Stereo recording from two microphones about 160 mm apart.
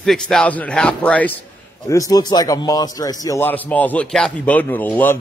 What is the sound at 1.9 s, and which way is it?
A man's voice, 20° left (ahead or behind).